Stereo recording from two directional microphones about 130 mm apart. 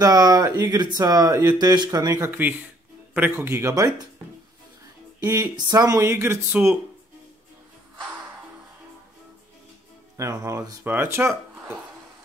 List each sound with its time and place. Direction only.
0.0 s speech: 30° right (ahead or behind)
5.2 s speech: 30° right (ahead or behind)
10.1 s speech: 25° right (ahead or behind)
10.8 s speech: 15° right (ahead or behind)